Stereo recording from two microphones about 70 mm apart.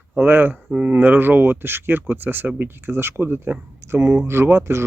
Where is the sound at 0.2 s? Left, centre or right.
Right.